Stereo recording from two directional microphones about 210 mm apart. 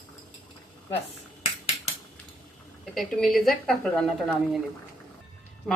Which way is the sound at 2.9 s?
Centre (ahead or behind).